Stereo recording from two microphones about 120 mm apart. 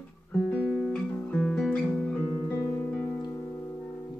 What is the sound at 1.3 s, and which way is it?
Guitar, 5° left (ahead or behind).